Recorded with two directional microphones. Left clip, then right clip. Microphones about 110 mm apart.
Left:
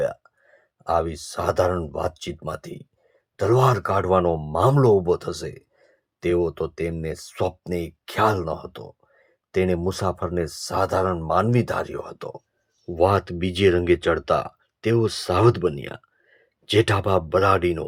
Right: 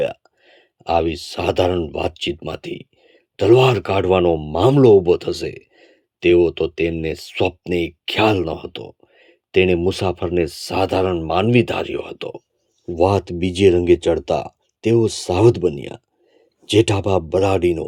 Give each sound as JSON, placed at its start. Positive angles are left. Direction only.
{"t": 0.0, "sound": "speech", "side_deg": -30}
{"t": 13.0, "sound": "speech", "side_deg": -40}